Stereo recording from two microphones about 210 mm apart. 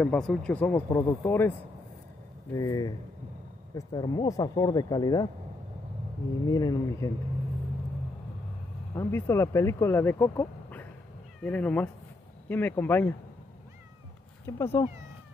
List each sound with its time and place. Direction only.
0.0 s speech: 5° left (ahead or behind)
2.5 s speech: 15° left (ahead or behind)
6.4 s speech: 15° left (ahead or behind)
8.9 s speech: 10° left (ahead or behind)
14.4 s speech: 10° left (ahead or behind)